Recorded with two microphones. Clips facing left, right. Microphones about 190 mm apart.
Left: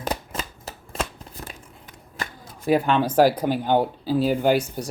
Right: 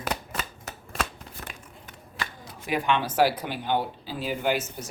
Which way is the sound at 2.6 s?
40° left (ahead or behind).